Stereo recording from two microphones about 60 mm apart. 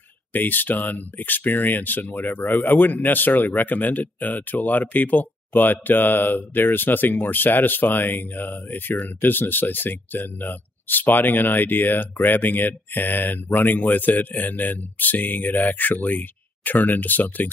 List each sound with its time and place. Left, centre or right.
0.3 s speech: left